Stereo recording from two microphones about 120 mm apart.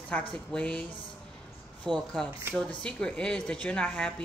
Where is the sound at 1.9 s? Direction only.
5° left (ahead or behind).